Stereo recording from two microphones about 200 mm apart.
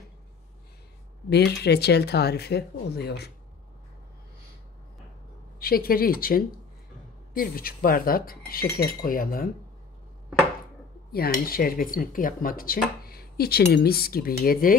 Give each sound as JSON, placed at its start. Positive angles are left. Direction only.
{"t": 1.3, "sound": "speech", "side_deg": 55}
{"t": 5.6, "sound": "speech", "side_deg": 50}
{"t": 11.1, "sound": "speech", "side_deg": 50}